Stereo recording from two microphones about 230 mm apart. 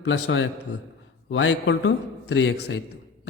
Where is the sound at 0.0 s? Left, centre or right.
Left.